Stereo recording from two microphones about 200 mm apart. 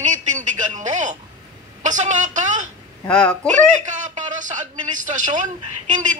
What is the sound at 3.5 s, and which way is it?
A man's voice, 40° right (ahead or behind).